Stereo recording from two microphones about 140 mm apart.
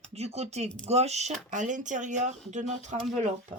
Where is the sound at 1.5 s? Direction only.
65° right (ahead or behind).